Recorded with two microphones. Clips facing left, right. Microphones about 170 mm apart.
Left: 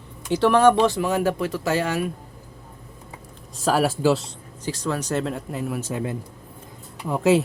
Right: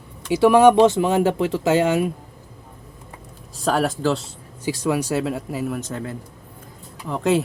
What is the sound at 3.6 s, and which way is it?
Speech, 5° left (ahead or behind).